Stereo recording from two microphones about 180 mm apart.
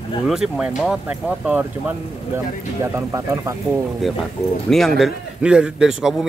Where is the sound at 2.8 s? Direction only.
15° right (ahead or behind).